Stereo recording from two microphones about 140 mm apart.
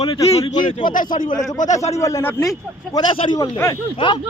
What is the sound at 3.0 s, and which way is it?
Speech, 30° left (ahead or behind).